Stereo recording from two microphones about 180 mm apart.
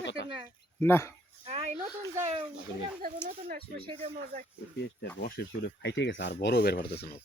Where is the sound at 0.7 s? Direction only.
15° left (ahead or behind).